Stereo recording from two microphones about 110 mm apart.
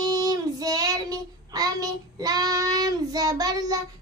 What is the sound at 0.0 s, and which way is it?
Child singing, 35° right (ahead or behind).